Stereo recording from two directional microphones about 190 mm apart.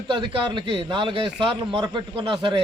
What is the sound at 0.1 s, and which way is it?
A man's voice, 25° right (ahead or behind).